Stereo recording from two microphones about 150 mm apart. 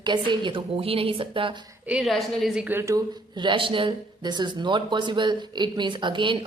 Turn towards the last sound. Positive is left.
turn(degrees=-30)  # may be behind; listen again after turning